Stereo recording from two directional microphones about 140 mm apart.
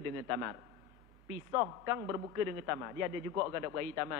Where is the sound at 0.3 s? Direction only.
25° right (ahead or behind).